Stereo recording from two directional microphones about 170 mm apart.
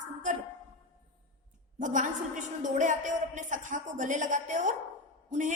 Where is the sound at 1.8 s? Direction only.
50° right (ahead or behind).